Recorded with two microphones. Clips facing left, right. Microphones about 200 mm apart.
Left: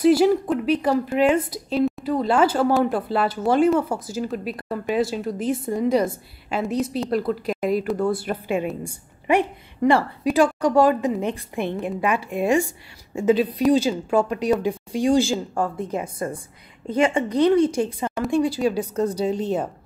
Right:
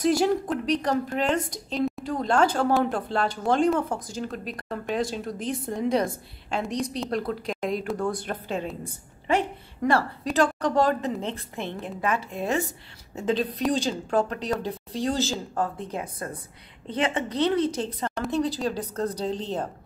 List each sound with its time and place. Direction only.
0.0 s a woman's voice: 5° left (ahead or behind)